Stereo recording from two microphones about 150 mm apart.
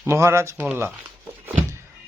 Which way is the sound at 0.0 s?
20° right (ahead or behind).